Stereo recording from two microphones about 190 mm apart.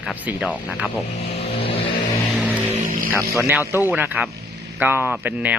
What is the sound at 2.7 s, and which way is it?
Vehicle, 45° right (ahead or behind).